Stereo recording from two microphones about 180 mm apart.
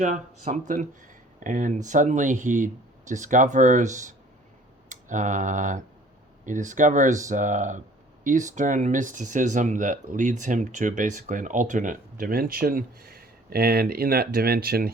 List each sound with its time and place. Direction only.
0.0 s speech: 45° right (ahead or behind)